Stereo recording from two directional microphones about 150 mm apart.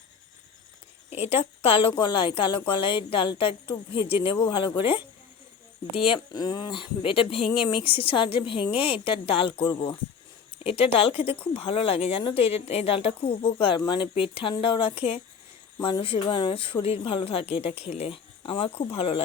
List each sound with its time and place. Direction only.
1.3 s speech: 40° left (ahead or behind)
5.9 s speech: 35° left (ahead or behind)